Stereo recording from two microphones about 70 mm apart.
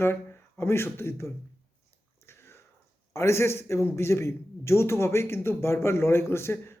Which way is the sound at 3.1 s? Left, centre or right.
Left.